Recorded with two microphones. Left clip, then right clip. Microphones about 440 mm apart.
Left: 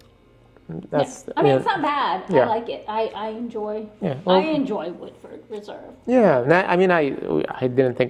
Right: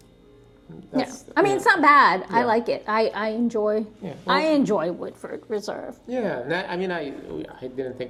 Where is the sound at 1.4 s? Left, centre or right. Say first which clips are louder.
Even; right.